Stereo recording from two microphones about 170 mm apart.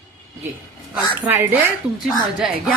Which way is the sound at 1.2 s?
10° right (ahead or behind).